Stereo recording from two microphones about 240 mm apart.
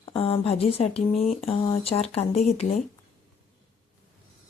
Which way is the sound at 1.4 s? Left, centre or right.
Left.